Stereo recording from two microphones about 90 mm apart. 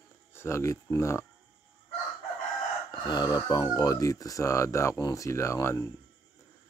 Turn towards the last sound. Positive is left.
turn(degrees=35)  # may be behind; listen again after turning